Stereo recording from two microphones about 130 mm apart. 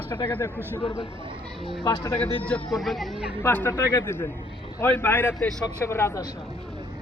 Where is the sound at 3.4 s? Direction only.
20° left (ahead or behind).